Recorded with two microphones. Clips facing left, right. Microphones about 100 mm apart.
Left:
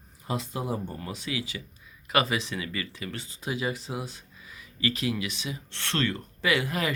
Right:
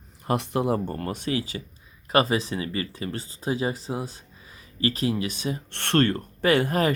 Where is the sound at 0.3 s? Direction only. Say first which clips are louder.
Right 7 dB; 65° right (ahead or behind).